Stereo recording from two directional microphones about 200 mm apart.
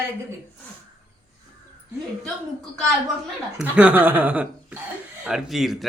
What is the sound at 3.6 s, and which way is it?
Child singing, 5° right (ahead or behind).